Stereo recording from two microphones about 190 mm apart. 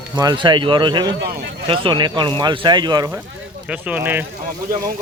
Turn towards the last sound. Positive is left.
turn(degrees=-10)  # may be behind; listen again after turning